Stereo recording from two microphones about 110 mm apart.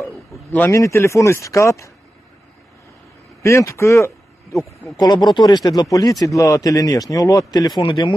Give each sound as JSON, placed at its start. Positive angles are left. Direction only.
{"t": 0.7, "sound": "speech", "side_deg": 25}
{"t": 3.4, "sound": "a man's voice", "side_deg": 25}
{"t": 4.9, "sound": "speech", "side_deg": 40}